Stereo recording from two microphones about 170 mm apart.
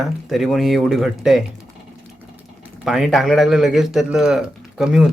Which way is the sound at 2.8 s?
Centre (ahead or behind).